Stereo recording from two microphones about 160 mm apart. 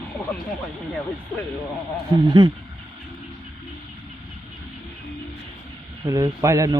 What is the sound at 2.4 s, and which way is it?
Speech, 30° right (ahead or behind).